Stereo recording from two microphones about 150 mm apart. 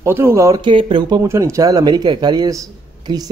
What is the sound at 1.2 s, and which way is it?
A man's voice, 20° right (ahead or behind).